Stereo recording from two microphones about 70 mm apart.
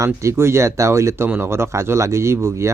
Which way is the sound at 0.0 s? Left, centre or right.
Right.